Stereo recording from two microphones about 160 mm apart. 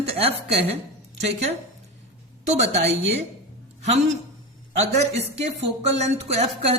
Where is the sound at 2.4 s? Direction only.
40° right (ahead or behind).